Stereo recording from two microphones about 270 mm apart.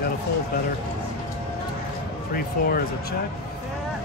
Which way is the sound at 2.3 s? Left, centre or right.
Left.